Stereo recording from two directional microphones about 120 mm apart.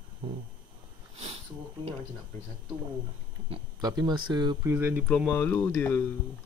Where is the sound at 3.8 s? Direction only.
30° right (ahead or behind).